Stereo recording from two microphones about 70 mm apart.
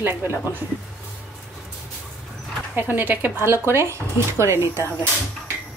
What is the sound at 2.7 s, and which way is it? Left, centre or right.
Speech, right.